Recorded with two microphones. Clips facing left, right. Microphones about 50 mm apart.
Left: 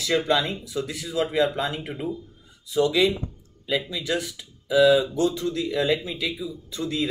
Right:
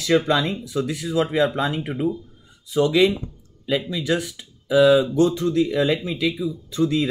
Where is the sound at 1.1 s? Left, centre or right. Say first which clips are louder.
Right 2 dB; centre.